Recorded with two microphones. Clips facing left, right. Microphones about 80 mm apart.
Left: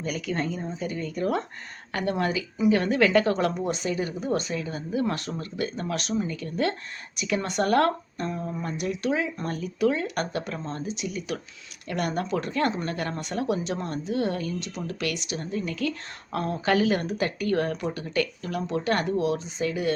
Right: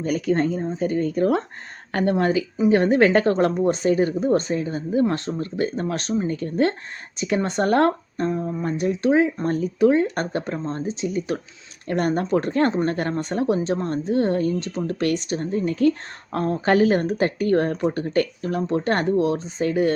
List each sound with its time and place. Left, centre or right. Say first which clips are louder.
0.0 s speech: right 8 dB; right